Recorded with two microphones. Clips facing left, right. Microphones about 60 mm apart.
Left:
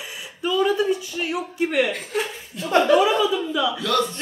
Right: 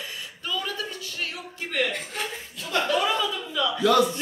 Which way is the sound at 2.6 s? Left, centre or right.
Left.